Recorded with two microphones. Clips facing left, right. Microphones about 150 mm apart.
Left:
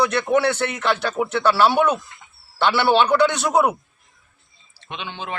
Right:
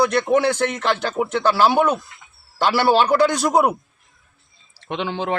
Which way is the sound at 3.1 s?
30° right (ahead or behind).